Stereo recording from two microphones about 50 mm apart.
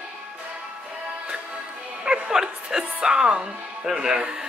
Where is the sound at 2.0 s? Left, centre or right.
Centre.